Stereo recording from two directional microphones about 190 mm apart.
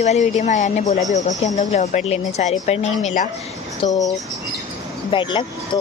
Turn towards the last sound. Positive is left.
turn(degrees=25)  # may be behind; listen again after turning